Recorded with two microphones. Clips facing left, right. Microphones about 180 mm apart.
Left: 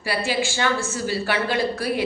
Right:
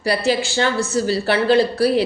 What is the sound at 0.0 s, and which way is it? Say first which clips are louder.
A woman's voice: right 5 dB; 40° right (ahead or behind).